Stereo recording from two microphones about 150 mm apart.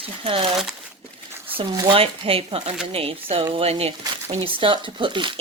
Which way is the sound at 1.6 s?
35° right (ahead or behind).